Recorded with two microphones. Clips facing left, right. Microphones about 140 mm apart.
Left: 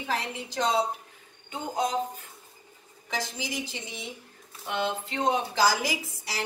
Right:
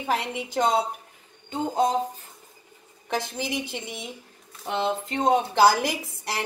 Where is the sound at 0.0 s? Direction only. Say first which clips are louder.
Right 4 dB; 60° right (ahead or behind).